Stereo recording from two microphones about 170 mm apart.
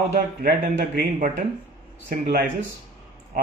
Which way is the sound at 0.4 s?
65° right (ahead or behind).